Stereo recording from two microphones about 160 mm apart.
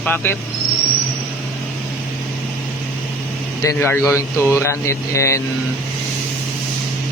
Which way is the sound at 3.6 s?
15° left (ahead or behind).